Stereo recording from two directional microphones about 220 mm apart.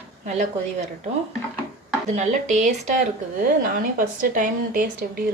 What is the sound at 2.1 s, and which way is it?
A woman's voice, 35° right (ahead or behind).